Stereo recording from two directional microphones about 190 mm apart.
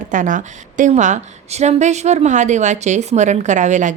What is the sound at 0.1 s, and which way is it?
A woman's voice, 45° right (ahead or behind).